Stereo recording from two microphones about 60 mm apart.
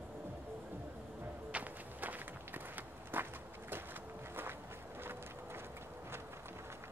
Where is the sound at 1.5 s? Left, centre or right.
Right.